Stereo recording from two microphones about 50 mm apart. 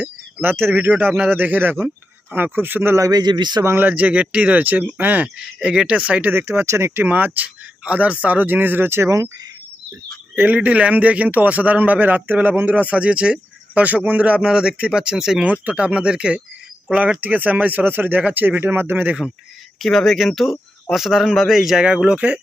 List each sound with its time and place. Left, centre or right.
0.3 s speech: right
3.9 s a man's voice: right
5.6 s a man's voice: centre
6.0 s a man's voice: right
6.3 s speech: right
7.1 s speech: right
9.0 s speech: right
10.5 s a man's voice: right; by 15.4 s centre
15.4 s a man's voice: right
17.2 s speech: right
19.8 s speech: centre
21.8 s a man's voice: centre